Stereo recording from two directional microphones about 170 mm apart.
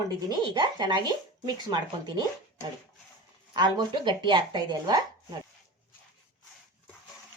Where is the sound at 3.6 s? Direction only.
25° right (ahead or behind).